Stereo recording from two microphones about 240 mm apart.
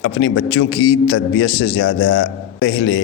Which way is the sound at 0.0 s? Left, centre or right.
Left.